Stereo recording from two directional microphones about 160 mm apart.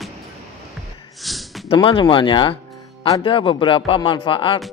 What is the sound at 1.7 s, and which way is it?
Speech, 30° left (ahead or behind).